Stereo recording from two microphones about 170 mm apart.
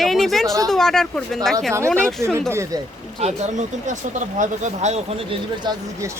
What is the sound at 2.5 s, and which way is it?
Speech, 15° right (ahead or behind).